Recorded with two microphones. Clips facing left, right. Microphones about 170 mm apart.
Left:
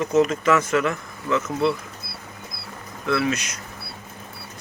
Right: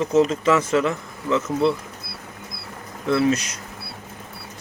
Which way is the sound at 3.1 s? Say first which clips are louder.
Right 4 dB; 35° right (ahead or behind).